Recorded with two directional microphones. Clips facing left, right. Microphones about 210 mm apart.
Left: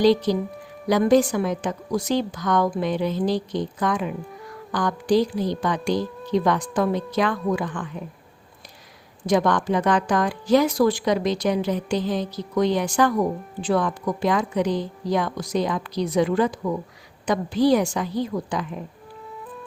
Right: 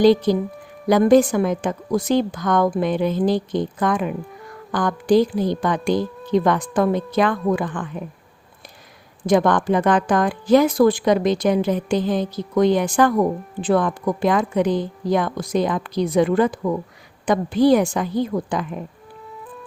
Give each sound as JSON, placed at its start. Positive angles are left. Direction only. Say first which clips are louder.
{"t": 0.0, "sound": "speech", "louder": "right 3 dB", "side_deg": -50}
{"t": 9.2, "sound": "speech", "louder": "right 3 dB", "side_deg": -55}